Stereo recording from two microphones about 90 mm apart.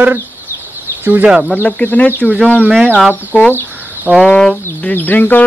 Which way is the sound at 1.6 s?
15° left (ahead or behind).